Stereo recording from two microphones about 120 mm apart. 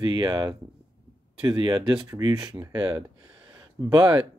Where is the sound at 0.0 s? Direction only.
35° right (ahead or behind).